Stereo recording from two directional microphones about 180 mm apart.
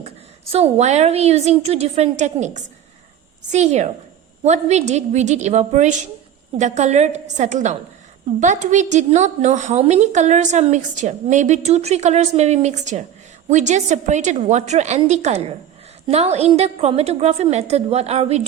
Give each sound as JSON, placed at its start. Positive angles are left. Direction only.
{"t": 0.5, "sound": "a woman's voice", "side_deg": -35}